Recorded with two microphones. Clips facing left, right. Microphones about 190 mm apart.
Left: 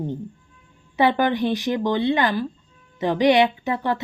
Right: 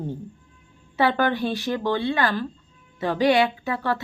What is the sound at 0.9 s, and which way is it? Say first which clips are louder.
Speech: left 2 dB; 15° left (ahead or behind).